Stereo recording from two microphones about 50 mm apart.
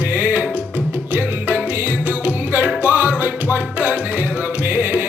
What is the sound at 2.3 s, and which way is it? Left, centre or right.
Music, right.